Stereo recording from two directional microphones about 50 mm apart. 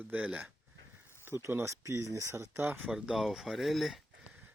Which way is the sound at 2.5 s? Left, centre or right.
Right.